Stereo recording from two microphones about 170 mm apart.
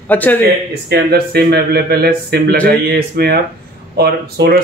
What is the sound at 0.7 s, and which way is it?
A man's voice, 70° right (ahead or behind).